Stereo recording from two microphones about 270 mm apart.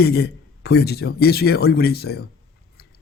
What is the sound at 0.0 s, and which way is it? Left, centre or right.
A man's voice, left.